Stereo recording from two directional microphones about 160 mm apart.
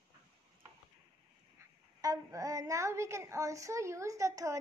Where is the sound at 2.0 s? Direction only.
20° right (ahead or behind).